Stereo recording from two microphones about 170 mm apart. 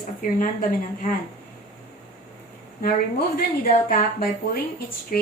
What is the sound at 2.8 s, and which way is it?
A woman's voice, 60° left (ahead or behind).